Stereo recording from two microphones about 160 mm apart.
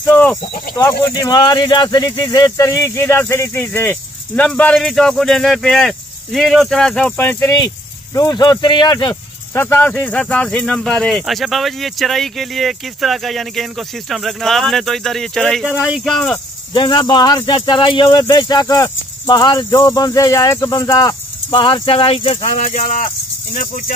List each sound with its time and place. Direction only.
0.0 s a sound: 10° left (ahead or behind)
0.7 s speech: 20° left (ahead or behind)
9.1 s speech: 15° left (ahead or behind)
16.7 s speech: 30° left (ahead or behind); by 23.8 s 55° left (ahead or behind)